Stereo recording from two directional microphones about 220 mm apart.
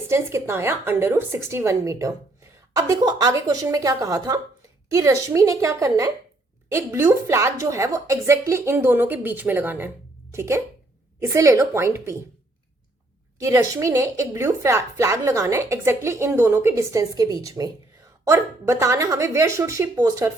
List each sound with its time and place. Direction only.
0.1 s speech: 10° right (ahead or behind)
13.4 s speech: 15° right (ahead or behind)